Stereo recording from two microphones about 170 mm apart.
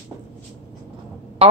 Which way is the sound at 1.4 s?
35° right (ahead or behind).